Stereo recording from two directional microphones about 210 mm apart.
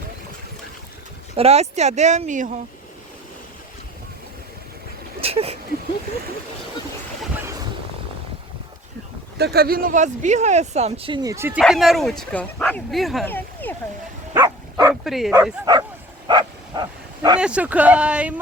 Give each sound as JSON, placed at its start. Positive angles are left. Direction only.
{"t": 1.4, "sound": "speech", "side_deg": -30}
{"t": 5.2, "sound": "a sound", "side_deg": -30}
{"t": 9.4, "sound": "speech", "side_deg": -50}
{"t": 11.6, "sound": "speech", "side_deg": 0}
{"t": 14.3, "sound": "dog", "side_deg": -15}
{"t": 15.0, "sound": "speech", "side_deg": 0}
{"t": 15.7, "sound": "speech", "side_deg": -20}
{"t": 16.2, "sound": "bow-wow", "side_deg": -20}
{"t": 17.4, "sound": "speech", "side_deg": -5}